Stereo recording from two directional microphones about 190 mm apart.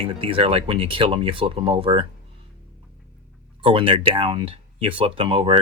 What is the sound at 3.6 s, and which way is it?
Speech, 30° right (ahead or behind).